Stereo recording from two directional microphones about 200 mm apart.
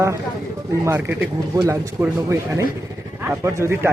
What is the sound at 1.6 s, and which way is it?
A man's voice, 15° right (ahead or behind).